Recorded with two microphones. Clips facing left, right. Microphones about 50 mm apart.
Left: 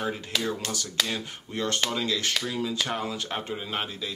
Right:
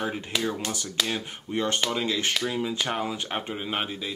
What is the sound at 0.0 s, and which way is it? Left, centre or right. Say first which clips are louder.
Speech: right 1 dB; centre.